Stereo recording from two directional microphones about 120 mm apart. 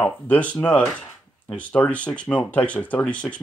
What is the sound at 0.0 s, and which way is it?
Speech, 15° left (ahead or behind).